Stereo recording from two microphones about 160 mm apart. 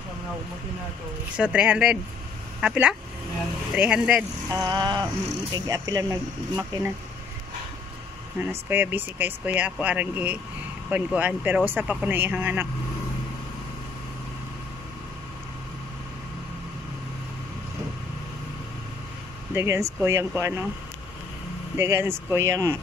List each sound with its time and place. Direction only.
1.3 s speech: 10° right (ahead or behind)
4.5 s speech: 25° right (ahead or behind)
8.4 s speech: 10° right (ahead or behind)
19.5 s speech: 15° right (ahead or behind)
21.7 s speech: 15° right (ahead or behind)